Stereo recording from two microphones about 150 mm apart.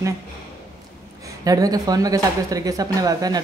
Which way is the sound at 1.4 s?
25° right (ahead or behind).